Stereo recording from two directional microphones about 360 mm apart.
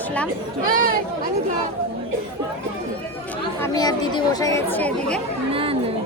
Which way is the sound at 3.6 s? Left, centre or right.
Centre.